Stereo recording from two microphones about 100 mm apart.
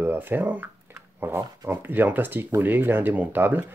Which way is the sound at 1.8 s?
20° right (ahead or behind).